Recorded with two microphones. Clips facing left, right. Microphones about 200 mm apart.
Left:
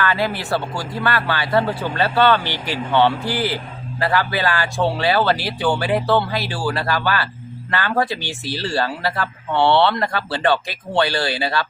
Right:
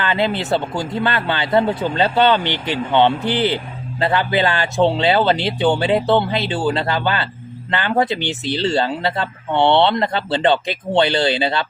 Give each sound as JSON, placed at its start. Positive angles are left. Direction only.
{"t": 0.0, "sound": "speech", "side_deg": -20}